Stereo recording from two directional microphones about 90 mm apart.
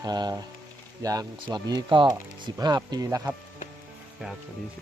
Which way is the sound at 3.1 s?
35° right (ahead or behind).